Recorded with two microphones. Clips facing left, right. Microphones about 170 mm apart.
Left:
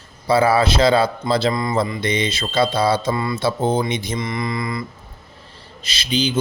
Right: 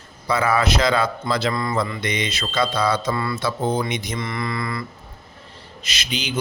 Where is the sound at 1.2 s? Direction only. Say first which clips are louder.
Left 3 dB; 30° left (ahead or behind).